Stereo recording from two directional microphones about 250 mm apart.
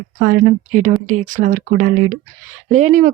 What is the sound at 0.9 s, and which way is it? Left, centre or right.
Speech, right.